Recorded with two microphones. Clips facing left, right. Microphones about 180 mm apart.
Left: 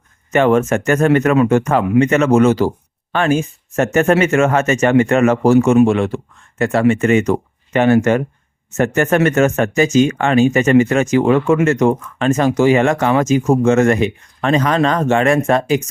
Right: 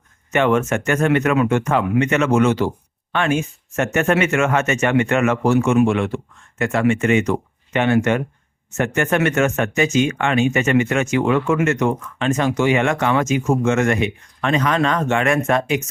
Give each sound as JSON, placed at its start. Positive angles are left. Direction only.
{"t": 0.3, "sound": "speech", "side_deg": 40}